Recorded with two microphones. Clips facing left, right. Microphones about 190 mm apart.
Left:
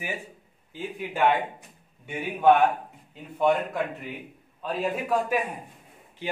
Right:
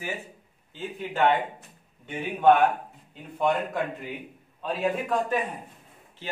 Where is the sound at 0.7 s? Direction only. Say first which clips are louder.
Even; 10° left (ahead or behind).